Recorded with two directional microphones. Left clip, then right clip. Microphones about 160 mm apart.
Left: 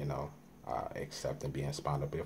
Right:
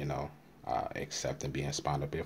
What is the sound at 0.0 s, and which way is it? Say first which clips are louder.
Speech: right 2 dB; 40° right (ahead or behind).